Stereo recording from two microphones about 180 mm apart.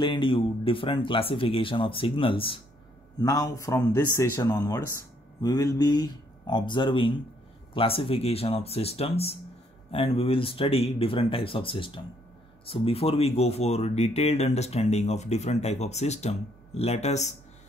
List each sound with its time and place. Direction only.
0.0 s speech: 25° left (ahead or behind)
3.2 s speech: 20° left (ahead or behind); by 17.3 s 40° left (ahead or behind)